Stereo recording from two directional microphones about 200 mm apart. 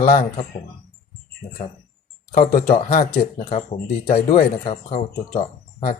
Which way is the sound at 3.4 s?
30° left (ahead or behind).